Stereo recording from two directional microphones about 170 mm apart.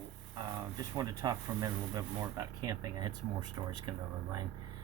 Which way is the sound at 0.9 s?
20° right (ahead or behind).